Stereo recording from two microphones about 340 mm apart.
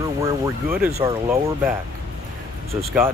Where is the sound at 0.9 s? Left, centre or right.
Centre.